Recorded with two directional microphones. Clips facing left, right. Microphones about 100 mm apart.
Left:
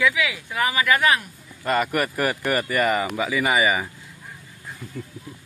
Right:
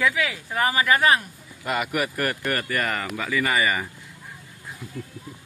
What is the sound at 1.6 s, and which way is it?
Speech, 5° right (ahead or behind).